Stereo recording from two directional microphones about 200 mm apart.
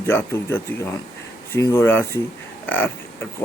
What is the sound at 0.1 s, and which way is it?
Speech, 10° left (ahead or behind).